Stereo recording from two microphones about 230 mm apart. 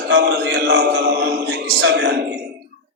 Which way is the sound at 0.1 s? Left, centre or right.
Right.